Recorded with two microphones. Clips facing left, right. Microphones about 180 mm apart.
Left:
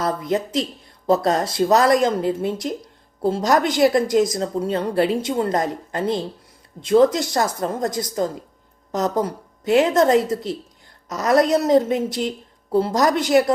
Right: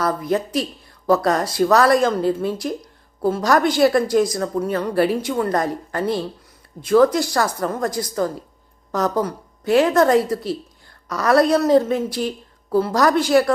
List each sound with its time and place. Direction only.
0.3 s a woman's voice: 20° left (ahead or behind)